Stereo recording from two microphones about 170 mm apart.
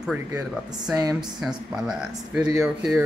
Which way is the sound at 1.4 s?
Centre (ahead or behind).